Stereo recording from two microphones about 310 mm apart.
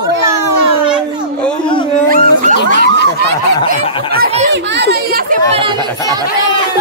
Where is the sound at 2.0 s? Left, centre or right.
Right.